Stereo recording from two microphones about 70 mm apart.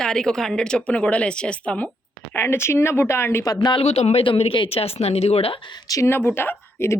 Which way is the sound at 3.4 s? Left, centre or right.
Left.